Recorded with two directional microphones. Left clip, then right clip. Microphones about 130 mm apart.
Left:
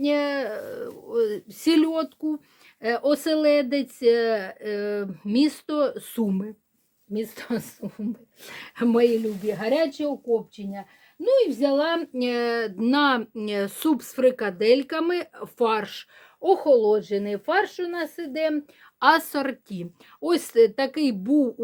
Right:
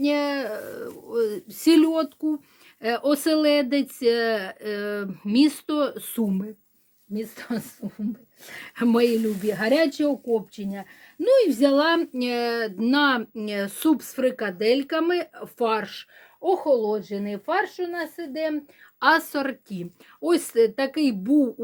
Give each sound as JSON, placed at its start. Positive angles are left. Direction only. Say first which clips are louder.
{"t": 0.0, "sound": "speech", "louder": "even", "side_deg": 10}
{"t": 6.1, "sound": "speech", "louder": "even", "side_deg": 30}
{"t": 7.1, "sound": "speech", "louder": "left 2 dB", "side_deg": 60}
{"t": 8.4, "sound": "speech", "louder": "even", "side_deg": 40}
{"t": 9.2, "sound": "speech", "louder": "right 2 dB", "side_deg": -40}
{"t": 12.1, "sound": "speech", "louder": "left 1 dB", "side_deg": 15}